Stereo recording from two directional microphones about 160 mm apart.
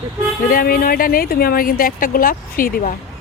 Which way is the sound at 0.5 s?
65° left (ahead or behind).